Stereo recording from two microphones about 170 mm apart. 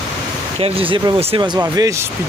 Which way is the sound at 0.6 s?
35° right (ahead or behind).